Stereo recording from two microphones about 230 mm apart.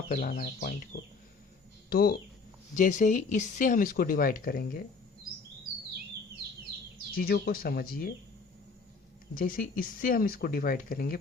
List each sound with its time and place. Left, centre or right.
0.1 s speech: left
1.9 s speech: left
7.1 s speech: left
9.3 s speech: left